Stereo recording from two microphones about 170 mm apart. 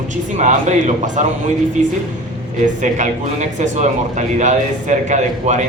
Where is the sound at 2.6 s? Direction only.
45° right (ahead or behind).